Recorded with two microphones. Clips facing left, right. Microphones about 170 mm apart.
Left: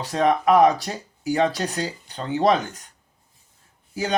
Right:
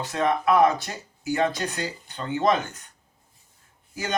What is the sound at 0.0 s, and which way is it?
Speech, 35° left (ahead or behind).